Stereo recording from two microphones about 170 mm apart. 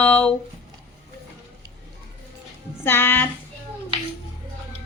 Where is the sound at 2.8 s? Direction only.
15° left (ahead or behind).